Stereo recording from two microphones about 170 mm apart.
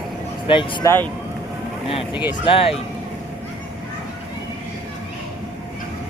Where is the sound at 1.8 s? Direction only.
30° left (ahead or behind).